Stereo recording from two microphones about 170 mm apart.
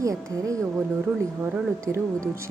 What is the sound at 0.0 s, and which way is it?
Speech, 20° right (ahead or behind).